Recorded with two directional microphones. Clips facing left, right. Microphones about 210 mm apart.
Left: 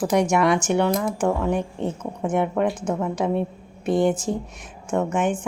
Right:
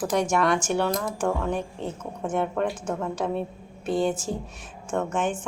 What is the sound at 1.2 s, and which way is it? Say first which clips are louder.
A woman's voice: left 4 dB; 20° left (ahead or behind).